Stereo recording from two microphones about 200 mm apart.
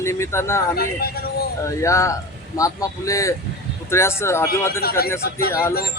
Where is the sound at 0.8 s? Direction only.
50° left (ahead or behind).